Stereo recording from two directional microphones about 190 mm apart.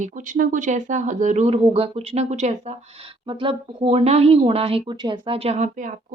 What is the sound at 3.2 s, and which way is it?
Speech, 25° right (ahead or behind).